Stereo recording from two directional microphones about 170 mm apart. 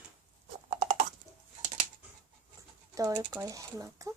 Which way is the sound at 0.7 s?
45° right (ahead or behind).